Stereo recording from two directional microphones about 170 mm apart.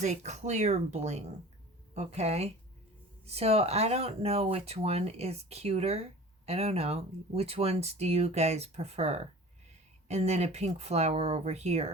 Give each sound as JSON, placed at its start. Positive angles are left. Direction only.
{"t": 0.0, "sound": "speech", "side_deg": -45}